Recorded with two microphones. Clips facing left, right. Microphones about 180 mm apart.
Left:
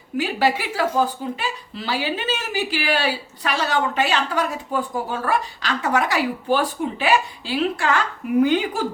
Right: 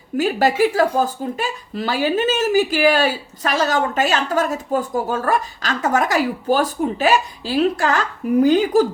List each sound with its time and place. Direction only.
0.2 s speech: 45° right (ahead or behind)